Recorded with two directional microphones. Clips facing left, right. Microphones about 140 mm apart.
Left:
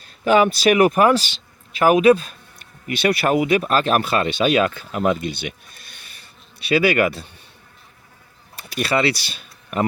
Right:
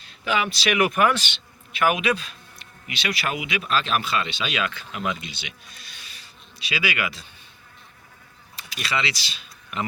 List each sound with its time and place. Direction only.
0.3 s speech: 45° left (ahead or behind)
8.7 s speech: 55° left (ahead or behind)